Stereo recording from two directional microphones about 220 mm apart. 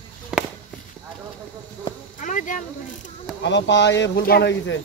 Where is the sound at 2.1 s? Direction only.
35° left (ahead or behind).